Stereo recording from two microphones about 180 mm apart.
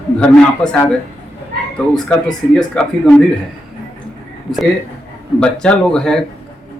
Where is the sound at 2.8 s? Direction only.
5° left (ahead or behind).